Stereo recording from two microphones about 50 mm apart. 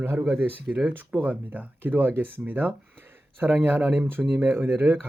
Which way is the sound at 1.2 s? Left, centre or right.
Right.